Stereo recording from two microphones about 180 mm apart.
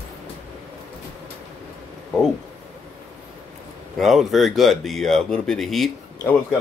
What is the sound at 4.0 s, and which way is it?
Speech, centre (ahead or behind).